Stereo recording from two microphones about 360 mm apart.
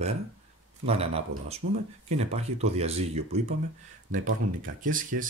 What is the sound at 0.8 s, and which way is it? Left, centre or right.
Speech, centre.